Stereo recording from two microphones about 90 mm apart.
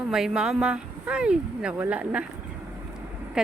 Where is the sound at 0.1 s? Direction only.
5° right (ahead or behind).